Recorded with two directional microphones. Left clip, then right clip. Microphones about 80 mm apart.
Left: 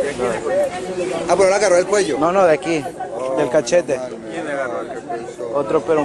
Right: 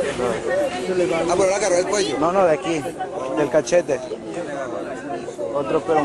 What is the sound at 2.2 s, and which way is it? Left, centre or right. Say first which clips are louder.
Speech: left 2 dB; centre.